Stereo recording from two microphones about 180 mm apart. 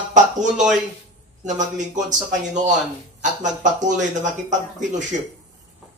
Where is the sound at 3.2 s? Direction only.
45° right (ahead or behind).